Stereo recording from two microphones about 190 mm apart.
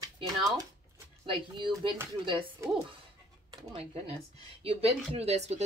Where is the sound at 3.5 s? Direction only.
30° right (ahead or behind).